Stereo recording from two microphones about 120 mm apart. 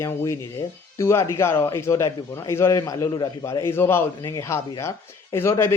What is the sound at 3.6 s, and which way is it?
Speech, 20° left (ahead or behind).